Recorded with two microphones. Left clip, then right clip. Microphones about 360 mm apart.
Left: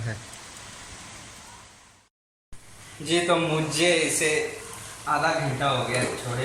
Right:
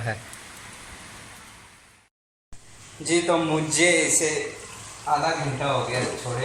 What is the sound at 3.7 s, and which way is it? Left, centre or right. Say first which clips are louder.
Speech: right 3 dB; centre.